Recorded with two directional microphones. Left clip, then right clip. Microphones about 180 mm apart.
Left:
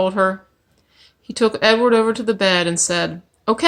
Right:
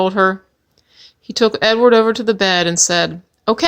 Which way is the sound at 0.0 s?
45° right (ahead or behind).